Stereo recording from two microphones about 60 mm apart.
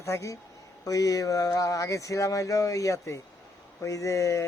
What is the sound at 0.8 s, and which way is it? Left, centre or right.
A man's voice, left.